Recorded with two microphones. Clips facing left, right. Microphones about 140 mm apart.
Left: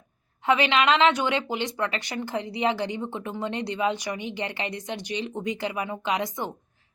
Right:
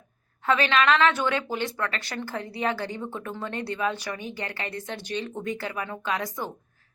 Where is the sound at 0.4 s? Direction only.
15° left (ahead or behind).